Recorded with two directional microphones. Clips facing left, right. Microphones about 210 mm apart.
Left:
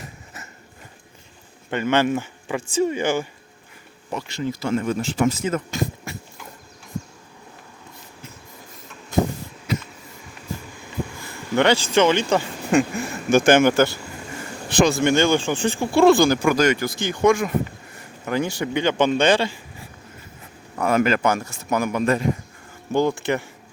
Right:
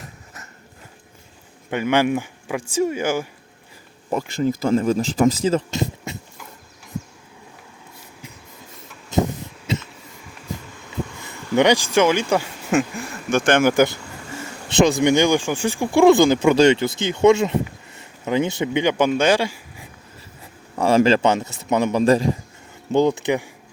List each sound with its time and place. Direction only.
1.7 s speech: 10° right (ahead or behind)
4.1 s speech: 45° right (ahead or behind); by 6.1 s 25° right (ahead or behind)
9.7 s a sound: 25° right (ahead or behind)
11.2 s speech: 20° right (ahead or behind)
13.3 s speech: 5° left (ahead or behind)
13.7 s speech: 15° right (ahead or behind)
20.7 s speech: 30° right (ahead or behind)
22.9 s speech: 20° right (ahead or behind)